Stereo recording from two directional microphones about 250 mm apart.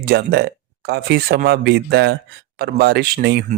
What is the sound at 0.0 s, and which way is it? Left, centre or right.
Speech, right.